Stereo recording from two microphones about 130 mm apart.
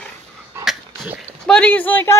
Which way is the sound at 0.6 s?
10° right (ahead or behind).